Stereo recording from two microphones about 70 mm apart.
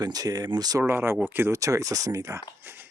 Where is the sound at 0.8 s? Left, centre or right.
Right.